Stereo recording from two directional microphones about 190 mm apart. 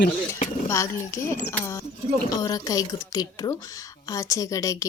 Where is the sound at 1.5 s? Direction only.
15° left (ahead or behind).